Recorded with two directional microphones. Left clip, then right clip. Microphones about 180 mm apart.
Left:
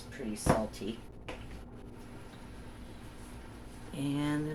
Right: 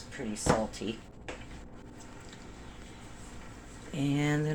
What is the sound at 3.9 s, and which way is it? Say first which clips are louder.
Speech: right 3 dB; 25° right (ahead or behind).